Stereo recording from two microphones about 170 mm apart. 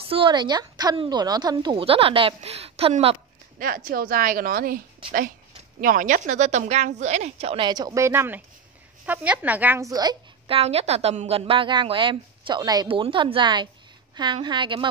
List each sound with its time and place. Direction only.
0.1 s a woman's voice: 30° right (ahead or behind)
3.5 s a woman's voice: 60° right (ahead or behind); by 14.9 s 30° right (ahead or behind)